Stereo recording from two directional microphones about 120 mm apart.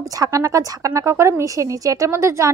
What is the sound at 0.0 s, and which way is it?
A woman's voice, 30° right (ahead or behind).